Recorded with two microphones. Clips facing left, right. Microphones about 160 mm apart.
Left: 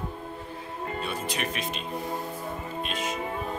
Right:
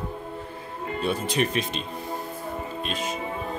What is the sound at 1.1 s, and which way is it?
Speech, 30° right (ahead or behind).